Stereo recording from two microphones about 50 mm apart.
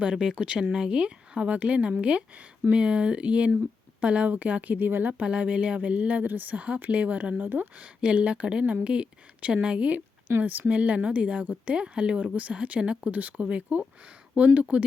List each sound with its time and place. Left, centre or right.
0.0 s speech: centre; by 4.9 s right
4.9 s speech: right
5.1 s speech: right
8.0 s speech: right
10.4 s speech: right
11.8 s speech: centre